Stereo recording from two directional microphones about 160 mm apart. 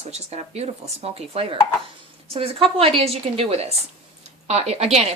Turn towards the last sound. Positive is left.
turn(degrees=-40)  # may be behind; listen again after turning